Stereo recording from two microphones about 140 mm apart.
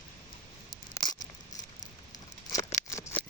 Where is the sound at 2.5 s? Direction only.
20° left (ahead or behind).